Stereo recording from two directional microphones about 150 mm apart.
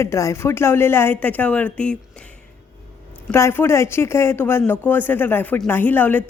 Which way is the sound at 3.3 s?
15° left (ahead or behind).